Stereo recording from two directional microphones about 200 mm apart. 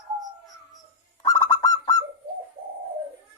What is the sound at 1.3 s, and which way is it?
Bird, 15° left (ahead or behind).